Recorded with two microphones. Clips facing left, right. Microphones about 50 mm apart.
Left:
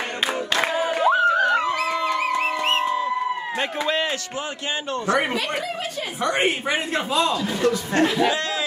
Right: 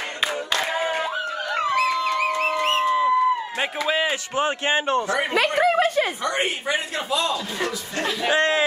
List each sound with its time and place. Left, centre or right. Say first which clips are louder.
0.7 s a sound: left 1 dB; right
1.0 s a sound: left 10 dB; left
3.8 s a man's voice: right 2 dB; centre
4.4 s a man's voice: right 6 dB; right
5.3 s speech: right 7 dB; right
6.2 s a man's voice: left 2 dB; left
8.3 s speech: right 4 dB; right